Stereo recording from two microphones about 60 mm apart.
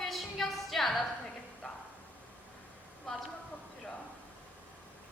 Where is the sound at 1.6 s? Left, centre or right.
Left.